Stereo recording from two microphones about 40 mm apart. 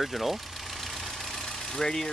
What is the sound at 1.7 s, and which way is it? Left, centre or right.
Speech, centre.